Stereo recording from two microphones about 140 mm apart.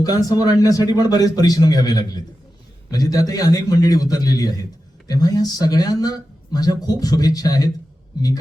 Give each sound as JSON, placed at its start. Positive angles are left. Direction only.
{"t": 0.0, "sound": "speech", "side_deg": 25}